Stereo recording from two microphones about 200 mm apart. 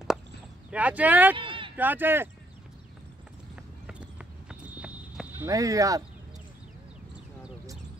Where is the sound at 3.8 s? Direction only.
5° right (ahead or behind).